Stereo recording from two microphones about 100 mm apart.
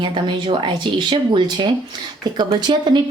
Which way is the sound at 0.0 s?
55° right (ahead or behind).